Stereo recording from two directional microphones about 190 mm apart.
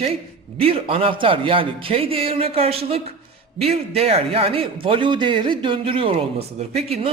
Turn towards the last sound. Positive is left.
turn(degrees=-35)  # may be behind; listen again after turning